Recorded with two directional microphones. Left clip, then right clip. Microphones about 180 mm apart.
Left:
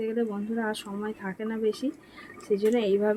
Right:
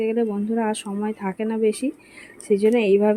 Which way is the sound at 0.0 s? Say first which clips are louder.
Right 7 dB; 40° right (ahead or behind).